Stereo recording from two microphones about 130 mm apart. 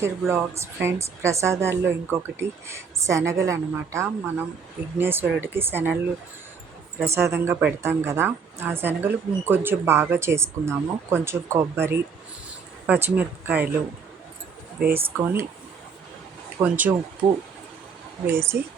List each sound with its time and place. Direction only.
0.0 s speech: 20° right (ahead or behind)
7.0 s speech: 20° right (ahead or behind)
14.9 s speech: 15° right (ahead or behind)
16.6 s speech: 15° right (ahead or behind)
18.3 s speech: 20° right (ahead or behind)